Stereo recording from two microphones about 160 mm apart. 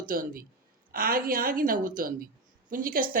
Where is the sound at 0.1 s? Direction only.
60° right (ahead or behind).